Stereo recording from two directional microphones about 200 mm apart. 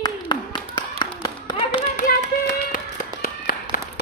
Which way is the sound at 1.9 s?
40° left (ahead or behind).